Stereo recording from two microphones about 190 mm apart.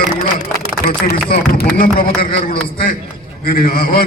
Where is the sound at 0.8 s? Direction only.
50° left (ahead or behind).